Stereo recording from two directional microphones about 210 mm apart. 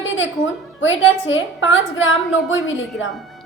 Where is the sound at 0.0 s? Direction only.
65° left (ahead or behind).